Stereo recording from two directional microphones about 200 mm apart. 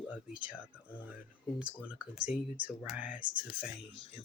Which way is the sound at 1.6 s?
5° right (ahead or behind).